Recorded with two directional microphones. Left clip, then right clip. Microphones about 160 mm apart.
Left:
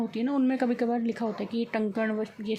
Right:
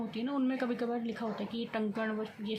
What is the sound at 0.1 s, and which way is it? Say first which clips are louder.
A woman's voice: left 4 dB; 40° left (ahead or behind).